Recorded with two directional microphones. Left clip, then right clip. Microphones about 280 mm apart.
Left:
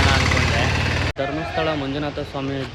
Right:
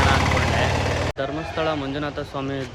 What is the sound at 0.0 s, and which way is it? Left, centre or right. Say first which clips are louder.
Vehicle: left 1 dB; right.